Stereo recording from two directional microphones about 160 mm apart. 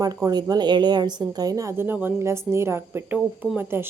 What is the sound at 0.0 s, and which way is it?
A woman's voice, 25° right (ahead or behind).